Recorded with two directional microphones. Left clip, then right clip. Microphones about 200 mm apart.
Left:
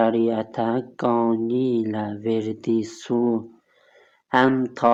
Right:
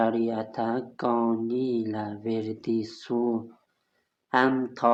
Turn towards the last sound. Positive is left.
turn(degrees=40)  # may be behind; listen again after turning